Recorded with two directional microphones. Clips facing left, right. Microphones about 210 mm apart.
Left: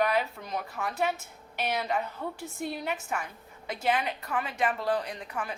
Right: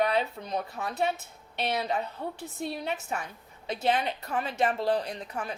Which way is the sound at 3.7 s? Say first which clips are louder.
Right 1 dB; 25° right (ahead or behind).